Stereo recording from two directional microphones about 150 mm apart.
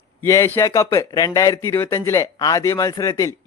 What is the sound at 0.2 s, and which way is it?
Speech, 20° left (ahead or behind).